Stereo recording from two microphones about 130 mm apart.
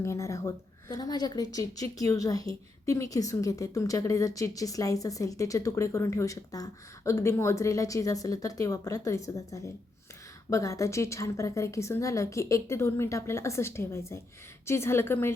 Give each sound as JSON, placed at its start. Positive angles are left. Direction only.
{"t": 0.0, "sound": "a woman's voice", "side_deg": 20}